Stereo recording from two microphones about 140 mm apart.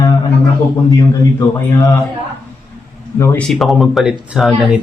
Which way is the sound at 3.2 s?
20° left (ahead or behind).